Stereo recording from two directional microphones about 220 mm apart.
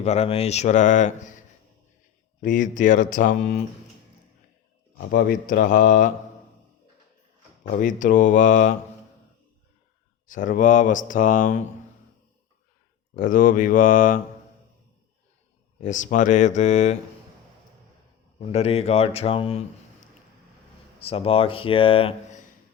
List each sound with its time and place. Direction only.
0.0 s speech: 30° left (ahead or behind)
2.4 s speech: 35° left (ahead or behind)
5.1 s speech: 40° left (ahead or behind)
7.8 s speech: 35° left (ahead or behind)
10.2 s speech: 35° left (ahead or behind)
13.1 s speech: 40° left (ahead or behind)
15.8 s speech: 35° left (ahead or behind)
18.3 s speech: 30° left (ahead or behind)
21.0 s speech: 25° left (ahead or behind)